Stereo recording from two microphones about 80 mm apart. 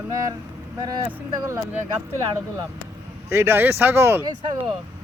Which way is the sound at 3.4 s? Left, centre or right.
Right.